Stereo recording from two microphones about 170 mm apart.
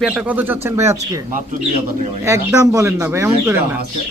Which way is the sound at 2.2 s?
15° right (ahead or behind).